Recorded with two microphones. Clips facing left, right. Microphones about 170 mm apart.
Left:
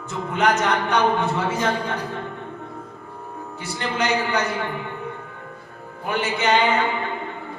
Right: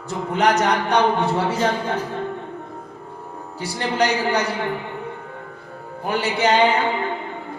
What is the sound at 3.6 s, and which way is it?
Speech, 35° right (ahead or behind).